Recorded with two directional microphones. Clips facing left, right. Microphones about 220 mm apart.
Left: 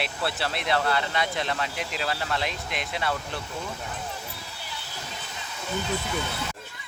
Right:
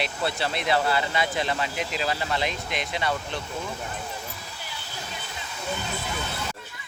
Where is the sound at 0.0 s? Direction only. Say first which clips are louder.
Right 2 dB; centre (ahead or behind).